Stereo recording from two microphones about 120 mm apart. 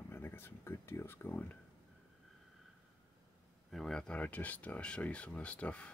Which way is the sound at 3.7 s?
5° left (ahead or behind).